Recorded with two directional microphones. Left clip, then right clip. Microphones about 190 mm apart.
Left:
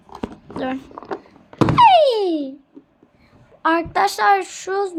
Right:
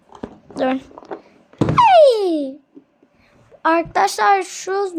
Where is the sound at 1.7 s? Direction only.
15° right (ahead or behind).